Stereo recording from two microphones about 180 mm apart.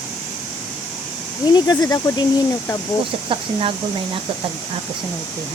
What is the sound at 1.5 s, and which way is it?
Speech, 20° left (ahead or behind).